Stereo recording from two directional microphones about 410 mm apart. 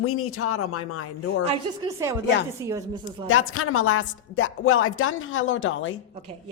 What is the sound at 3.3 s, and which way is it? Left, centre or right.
Speech, left.